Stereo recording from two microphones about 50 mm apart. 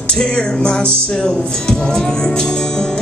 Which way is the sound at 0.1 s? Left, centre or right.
Centre.